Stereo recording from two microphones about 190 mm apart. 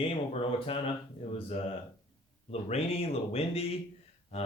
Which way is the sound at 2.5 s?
30° left (ahead or behind).